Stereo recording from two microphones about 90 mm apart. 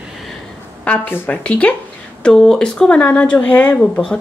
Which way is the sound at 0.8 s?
25° left (ahead or behind).